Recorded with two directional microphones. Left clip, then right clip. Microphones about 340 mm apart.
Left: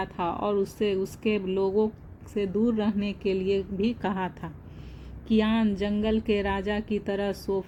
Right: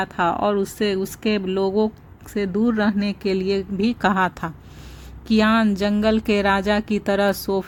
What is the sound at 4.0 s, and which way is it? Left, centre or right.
A woman's voice, right.